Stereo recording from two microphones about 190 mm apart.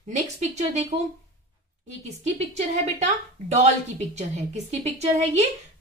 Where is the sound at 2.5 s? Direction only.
35° right (ahead or behind).